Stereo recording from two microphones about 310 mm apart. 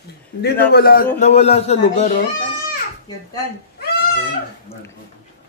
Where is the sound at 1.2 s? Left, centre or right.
Centre.